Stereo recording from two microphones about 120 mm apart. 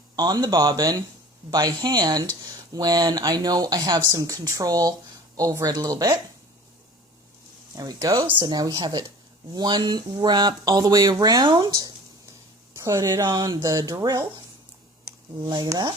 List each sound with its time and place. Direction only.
0.2 s speech: 35° right (ahead or behind)
7.8 s speech: 30° right (ahead or behind)
12.7 s speech: 25° right (ahead or behind)
15.4 s speech: 35° right (ahead or behind)